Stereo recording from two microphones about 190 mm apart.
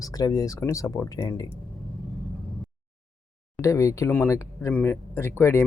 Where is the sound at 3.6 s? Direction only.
15° left (ahead or behind).